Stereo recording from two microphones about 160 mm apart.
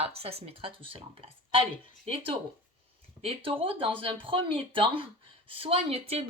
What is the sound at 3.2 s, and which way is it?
Speech, 35° right (ahead or behind).